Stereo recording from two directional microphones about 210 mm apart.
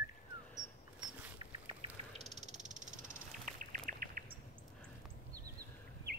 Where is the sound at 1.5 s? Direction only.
25° right (ahead or behind); by 4.2 s 40° right (ahead or behind).